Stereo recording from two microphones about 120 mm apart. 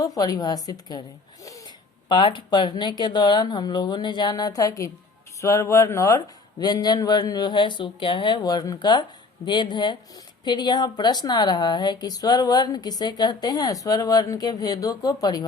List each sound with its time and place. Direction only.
0.0 s a woman's voice: 30° left (ahead or behind)